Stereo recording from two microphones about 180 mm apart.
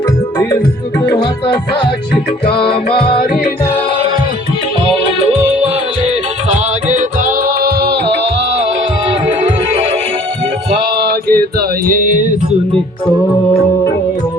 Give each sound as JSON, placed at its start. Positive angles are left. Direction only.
{"t": 6.8, "sound": "music", "side_deg": -45}
{"t": 11.0, "sound": "mantra", "side_deg": -60}